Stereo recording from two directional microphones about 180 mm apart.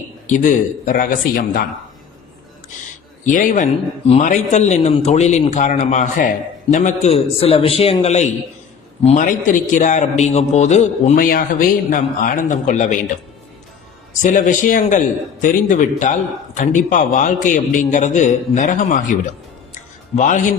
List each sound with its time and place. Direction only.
0.3 s a man's voice: 45° left (ahead or behind)
3.2 s a man's voice: 50° left (ahead or behind)
14.2 s a man's voice: 45° left (ahead or behind)
19.7 s a sound: 45° left (ahead or behind)